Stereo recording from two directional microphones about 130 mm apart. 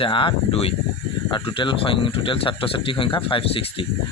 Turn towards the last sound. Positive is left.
turn(degrees=40)  # may be behind; listen again after turning